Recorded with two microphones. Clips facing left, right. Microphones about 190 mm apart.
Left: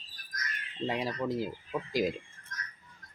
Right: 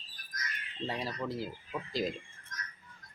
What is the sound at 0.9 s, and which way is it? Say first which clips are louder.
Speech: left 5 dB; 15° left (ahead or behind).